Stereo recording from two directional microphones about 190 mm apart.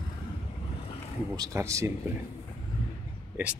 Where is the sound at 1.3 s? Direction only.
20° right (ahead or behind).